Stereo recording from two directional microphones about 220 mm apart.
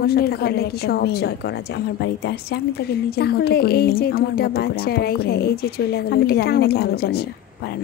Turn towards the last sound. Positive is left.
turn(degrees=45)  # may be behind; listen again after turning